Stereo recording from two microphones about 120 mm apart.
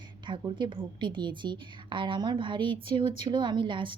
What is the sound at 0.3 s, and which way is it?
A woman's voice, 40° right (ahead or behind).